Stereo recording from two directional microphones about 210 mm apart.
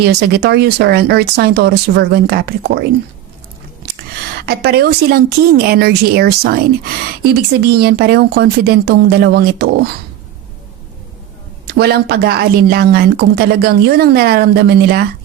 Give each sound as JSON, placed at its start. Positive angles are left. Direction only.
{"t": 0.0, "sound": "a woman's voice", "side_deg": -50}
{"t": 4.4, "sound": "a woman's voice", "side_deg": -50}
{"t": 7.6, "sound": "a woman's voice", "side_deg": -50}
{"t": 11.7, "sound": "a woman's voice", "side_deg": -50}